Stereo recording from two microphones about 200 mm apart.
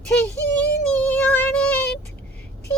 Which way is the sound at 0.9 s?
10° left (ahead or behind).